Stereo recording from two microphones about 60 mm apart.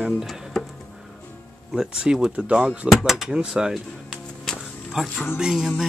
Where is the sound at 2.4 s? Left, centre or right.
Right.